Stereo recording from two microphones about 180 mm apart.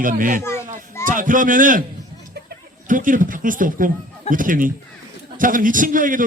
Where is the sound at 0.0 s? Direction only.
50° right (ahead or behind).